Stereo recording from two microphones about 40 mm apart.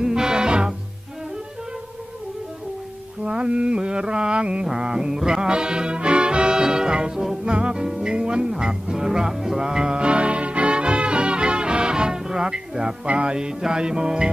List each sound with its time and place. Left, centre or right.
0.0 s music: centre
3.3 s mantra: right
4.6 s music: centre
13.0 s mantra: right